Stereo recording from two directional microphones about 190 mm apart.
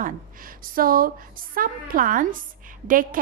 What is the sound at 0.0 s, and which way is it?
Speech, 45° right (ahead or behind).